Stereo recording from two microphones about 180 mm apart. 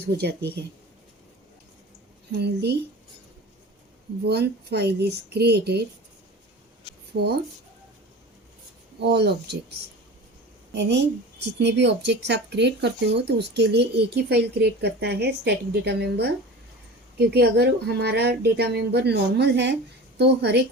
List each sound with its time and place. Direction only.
0.2 s speech: 65° right (ahead or behind)
2.3 s speech: 65° right (ahead or behind)
4.3 s speech: 65° right (ahead or behind)
9.0 s speech: 65° right (ahead or behind)
10.8 s speech: 75° right (ahead or behind)